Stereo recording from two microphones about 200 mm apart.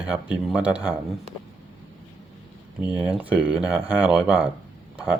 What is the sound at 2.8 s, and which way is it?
Speech, 5° right (ahead or behind).